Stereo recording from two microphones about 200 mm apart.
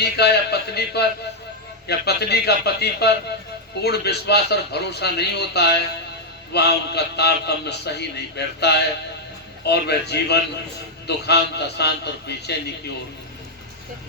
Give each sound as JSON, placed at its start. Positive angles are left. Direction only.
{"t": 0.0, "sound": "a man's voice", "side_deg": 55}